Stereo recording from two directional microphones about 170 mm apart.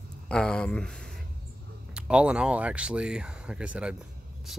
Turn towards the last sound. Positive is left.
turn(degrees=-5)  # may be behind; listen again after turning